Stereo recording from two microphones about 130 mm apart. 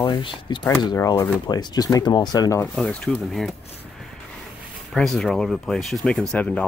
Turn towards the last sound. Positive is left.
turn(degrees=10)  # may be behind; listen again after turning